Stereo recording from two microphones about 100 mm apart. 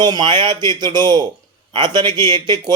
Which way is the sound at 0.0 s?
45° right (ahead or behind).